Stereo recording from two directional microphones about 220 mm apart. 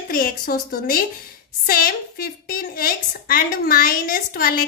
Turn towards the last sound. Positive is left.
turn(degrees=40)  # may be behind; listen again after turning